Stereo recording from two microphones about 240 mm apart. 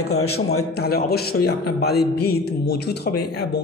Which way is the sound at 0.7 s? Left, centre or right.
Left.